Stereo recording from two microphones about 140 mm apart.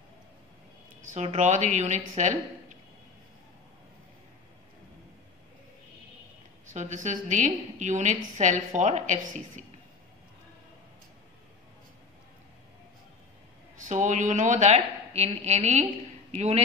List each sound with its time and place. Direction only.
1.0 s a woman's voice: 55° right (ahead or behind)
6.7 s a woman's voice: 60° right (ahead or behind)
13.7 s a woman's voice: 65° right (ahead or behind)